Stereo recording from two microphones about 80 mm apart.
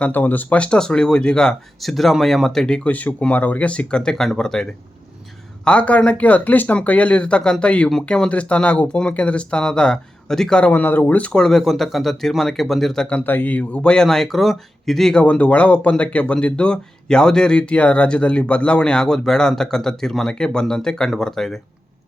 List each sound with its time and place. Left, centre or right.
0.0 s speech: left
10.7 s speech: left; by 13.1 s centre
13.1 s speech: centre
15.2 s speech: centre